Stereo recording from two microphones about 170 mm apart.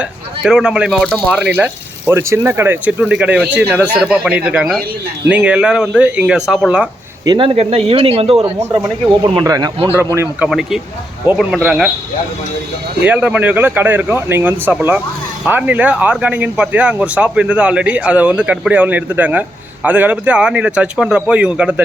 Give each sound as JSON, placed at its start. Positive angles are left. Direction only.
{"t": 0.0, "sound": "a man's voice", "side_deg": -5}
{"t": 7.3, "sound": "speech", "side_deg": -30}
{"t": 9.2, "sound": "speech", "side_deg": -25}
{"t": 9.9, "sound": "speech", "side_deg": -15}
{"t": 10.5, "sound": "a man's voice", "side_deg": 0}
{"t": 13.1, "sound": "speech", "side_deg": -10}